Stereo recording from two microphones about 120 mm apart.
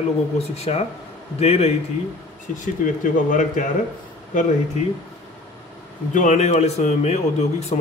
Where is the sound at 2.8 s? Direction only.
90° left.